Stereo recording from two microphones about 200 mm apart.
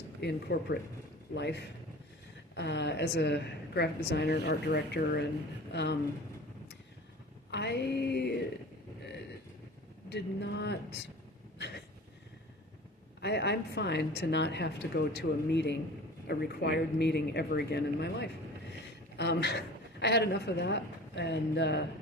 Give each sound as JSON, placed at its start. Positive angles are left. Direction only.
{"t": 0.2, "sound": "a woman's voice", "side_deg": 55}
{"t": 7.5, "sound": "music", "side_deg": 60}
{"t": 10.1, "sound": "a woman's voice", "side_deg": 60}
{"t": 13.2, "sound": "a woman's voice", "side_deg": 55}